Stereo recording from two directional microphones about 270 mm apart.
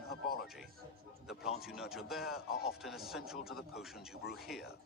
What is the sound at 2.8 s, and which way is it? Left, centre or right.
Speech, centre.